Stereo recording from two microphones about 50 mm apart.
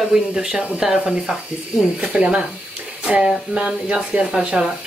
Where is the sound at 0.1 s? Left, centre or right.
Centre.